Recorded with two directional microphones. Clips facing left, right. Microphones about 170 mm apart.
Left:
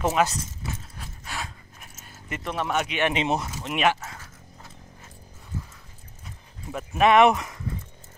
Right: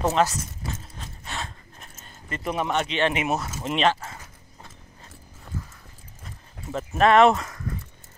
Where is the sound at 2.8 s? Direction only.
10° left (ahead or behind).